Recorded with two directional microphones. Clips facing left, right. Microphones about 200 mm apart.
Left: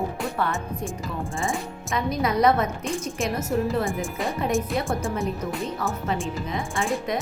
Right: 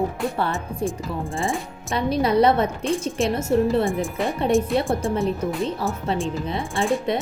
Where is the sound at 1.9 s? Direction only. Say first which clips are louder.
Right 5 dB; 30° right (ahead or behind).